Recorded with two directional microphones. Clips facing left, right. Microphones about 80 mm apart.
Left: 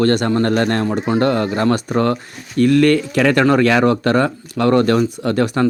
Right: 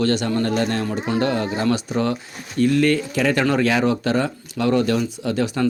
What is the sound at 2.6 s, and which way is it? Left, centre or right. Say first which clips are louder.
Speech: left 5 dB; left.